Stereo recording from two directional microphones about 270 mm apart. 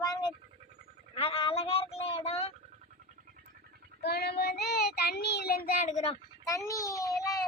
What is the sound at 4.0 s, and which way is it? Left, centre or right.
Child singing, left.